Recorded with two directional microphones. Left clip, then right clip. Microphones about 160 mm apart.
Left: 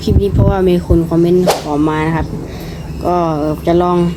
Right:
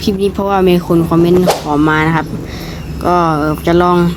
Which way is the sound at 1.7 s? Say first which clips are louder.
Right 3 dB; 20° right (ahead or behind).